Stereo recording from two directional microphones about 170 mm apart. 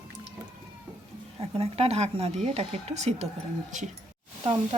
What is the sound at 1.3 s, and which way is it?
Speech, 35° right (ahead or behind).